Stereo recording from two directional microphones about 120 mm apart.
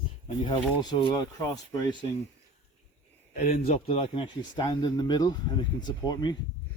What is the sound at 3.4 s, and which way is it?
Speech, 65° left (ahead or behind).